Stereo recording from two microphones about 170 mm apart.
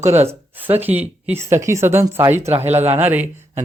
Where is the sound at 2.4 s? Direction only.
40° right (ahead or behind).